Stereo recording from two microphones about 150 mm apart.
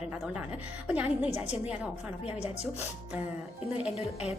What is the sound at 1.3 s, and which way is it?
Speech, 45° left (ahead or behind).